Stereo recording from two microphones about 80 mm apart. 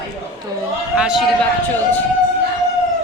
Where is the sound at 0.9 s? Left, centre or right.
Centre.